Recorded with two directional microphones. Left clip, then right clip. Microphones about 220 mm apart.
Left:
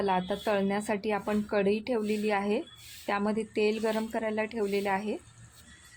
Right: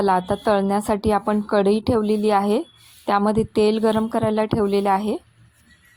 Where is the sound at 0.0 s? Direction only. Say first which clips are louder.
Right 10 dB; 25° right (ahead or behind).